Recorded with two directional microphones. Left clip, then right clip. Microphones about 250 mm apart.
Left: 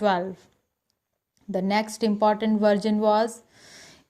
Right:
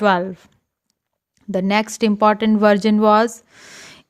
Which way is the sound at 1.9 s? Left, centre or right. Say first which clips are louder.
Right 7 dB; right.